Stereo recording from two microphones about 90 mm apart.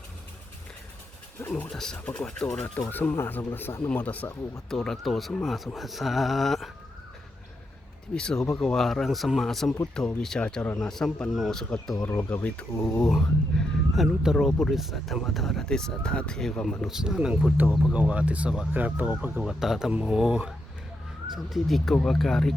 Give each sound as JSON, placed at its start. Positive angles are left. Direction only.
{"t": 1.4, "sound": "speech", "side_deg": 20}
{"t": 1.7, "sound": "speech", "side_deg": 5}
{"t": 4.7, "sound": "speech", "side_deg": 5}
{"t": 8.1, "sound": "speech", "side_deg": 10}
{"t": 12.0, "sound": "speech", "side_deg": 20}
{"t": 13.1, "sound": "speech", "side_deg": 5}
{"t": 16.8, "sound": "speech", "side_deg": -5}
{"t": 19.5, "sound": "speech", "side_deg": -5}